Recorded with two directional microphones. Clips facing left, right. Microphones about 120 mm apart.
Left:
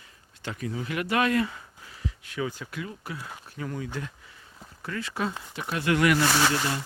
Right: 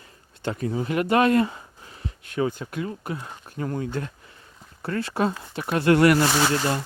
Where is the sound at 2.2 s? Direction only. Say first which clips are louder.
Right 7 dB; 50° right (ahead or behind).